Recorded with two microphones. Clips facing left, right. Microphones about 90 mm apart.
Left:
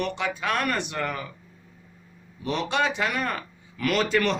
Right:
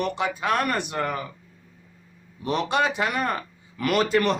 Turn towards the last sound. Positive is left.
turn(degrees=-40)  # may be behind; listen again after turning